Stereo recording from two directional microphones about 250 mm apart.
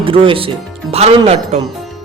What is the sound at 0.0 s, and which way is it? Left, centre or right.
A man's voice, right.